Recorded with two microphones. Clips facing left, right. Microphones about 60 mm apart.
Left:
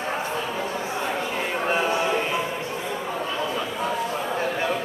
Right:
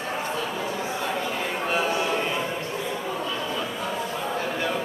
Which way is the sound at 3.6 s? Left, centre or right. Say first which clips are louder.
Left 3 dB; left.